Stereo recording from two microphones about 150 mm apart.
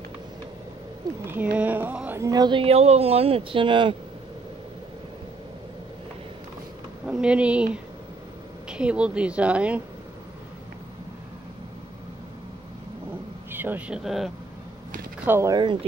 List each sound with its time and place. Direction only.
1.2 s speech: 10° right (ahead or behind); by 3.9 s 35° right (ahead or behind)
7.1 s a woman's voice: 5° right (ahead or behind)
13.5 s speech: 15° right (ahead or behind)
15.2 s a woman's voice: 15° right (ahead or behind)
15.5 s speech: 30° right (ahead or behind)